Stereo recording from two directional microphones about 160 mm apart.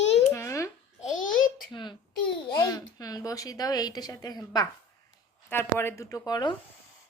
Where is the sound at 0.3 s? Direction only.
20° left (ahead or behind).